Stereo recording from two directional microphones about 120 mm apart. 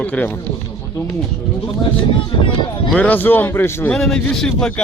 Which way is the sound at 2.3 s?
45° left (ahead or behind).